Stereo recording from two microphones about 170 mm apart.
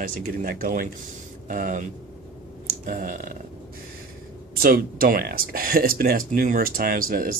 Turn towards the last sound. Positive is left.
turn(degrees=-60)  # may be behind; listen again after turning